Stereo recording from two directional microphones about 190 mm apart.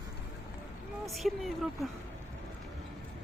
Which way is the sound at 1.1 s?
Centre (ahead or behind).